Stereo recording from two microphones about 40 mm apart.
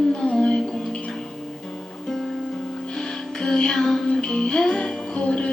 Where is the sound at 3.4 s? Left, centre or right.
Centre.